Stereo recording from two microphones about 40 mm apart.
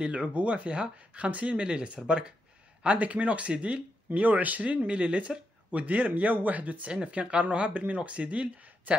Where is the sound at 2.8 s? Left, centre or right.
Right.